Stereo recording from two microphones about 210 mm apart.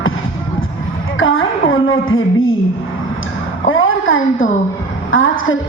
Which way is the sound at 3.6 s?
70° left (ahead or behind).